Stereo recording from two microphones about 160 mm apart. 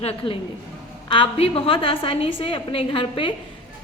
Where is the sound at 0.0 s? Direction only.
40° left (ahead or behind).